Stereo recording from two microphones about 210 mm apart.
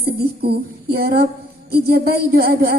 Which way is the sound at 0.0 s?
50° right (ahead or behind).